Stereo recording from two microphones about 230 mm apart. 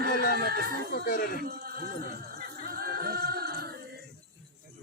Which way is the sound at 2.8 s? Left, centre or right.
Right.